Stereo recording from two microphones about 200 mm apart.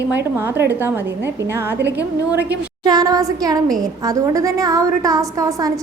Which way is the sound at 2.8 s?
20° right (ahead or behind).